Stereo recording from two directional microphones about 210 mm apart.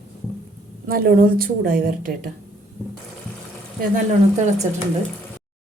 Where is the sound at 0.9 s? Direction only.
45° right (ahead or behind).